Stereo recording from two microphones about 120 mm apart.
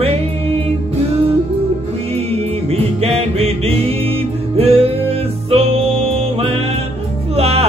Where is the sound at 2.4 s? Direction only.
55° right (ahead or behind).